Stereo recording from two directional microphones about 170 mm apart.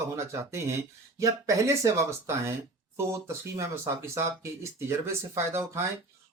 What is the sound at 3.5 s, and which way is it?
Speech, 15° right (ahead or behind).